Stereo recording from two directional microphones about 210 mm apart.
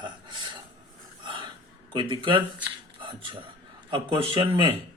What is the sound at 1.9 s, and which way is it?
Speech, 20° right (ahead or behind).